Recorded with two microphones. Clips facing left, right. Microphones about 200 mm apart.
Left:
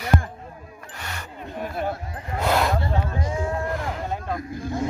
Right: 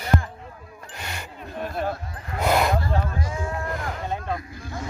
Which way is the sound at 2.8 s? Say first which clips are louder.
Left 1 dB; 20° left (ahead or behind).